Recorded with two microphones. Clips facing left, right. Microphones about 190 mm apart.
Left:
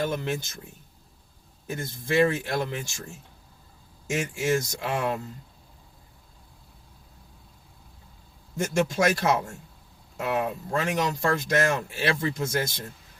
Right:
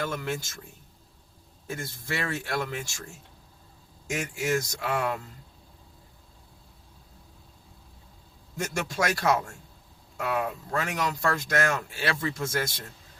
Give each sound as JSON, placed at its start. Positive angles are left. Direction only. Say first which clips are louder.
{"t": 0.0, "sound": "speech", "louder": "left 3 dB", "side_deg": 20}
{"t": 1.6, "sound": "speech", "louder": "left 3 dB", "side_deg": 20}
{"t": 4.0, "sound": "speech", "louder": "left 3 dB", "side_deg": 25}
{"t": 8.5, "sound": "speech", "louder": "left 6 dB", "side_deg": 25}